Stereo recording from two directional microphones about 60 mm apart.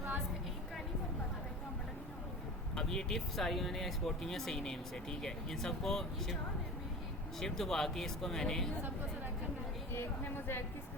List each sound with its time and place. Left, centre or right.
2.7 s speech: centre
7.3 s speech: centre
9.9 s speech: left